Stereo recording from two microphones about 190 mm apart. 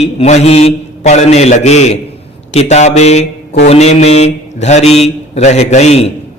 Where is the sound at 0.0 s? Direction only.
35° left (ahead or behind).